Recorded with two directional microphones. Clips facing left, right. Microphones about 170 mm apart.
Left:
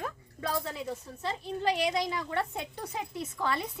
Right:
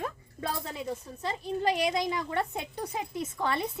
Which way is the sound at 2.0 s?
20° right (ahead or behind).